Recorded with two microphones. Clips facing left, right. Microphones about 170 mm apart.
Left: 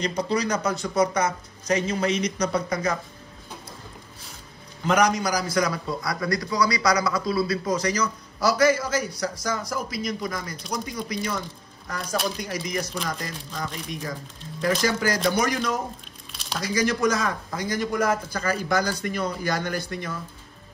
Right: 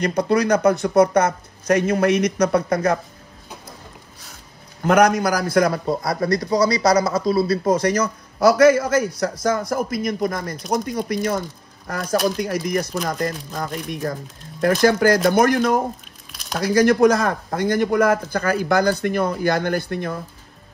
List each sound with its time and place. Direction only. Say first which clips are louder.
0.0 s speech: right 6 dB; 60° right (ahead or behind)
4.8 s speech: right 6 dB; 55° right (ahead or behind)
6.2 s speech: right 6 dB; 25° right (ahead or behind)
7.6 s speech: right 6 dB; 55° right (ahead or behind)